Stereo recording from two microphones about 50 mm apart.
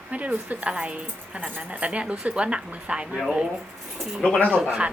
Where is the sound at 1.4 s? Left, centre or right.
Right.